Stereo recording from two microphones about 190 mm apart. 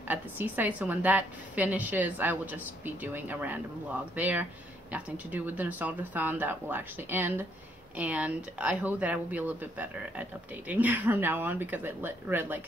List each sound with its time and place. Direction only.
0.1 s a woman's voice: 10° right (ahead or behind)